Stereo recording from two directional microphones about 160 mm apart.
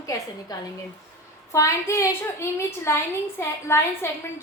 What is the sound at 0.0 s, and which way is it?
Speech, 20° left (ahead or behind).